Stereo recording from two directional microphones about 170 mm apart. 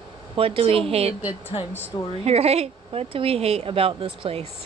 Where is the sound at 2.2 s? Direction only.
35° right (ahead or behind).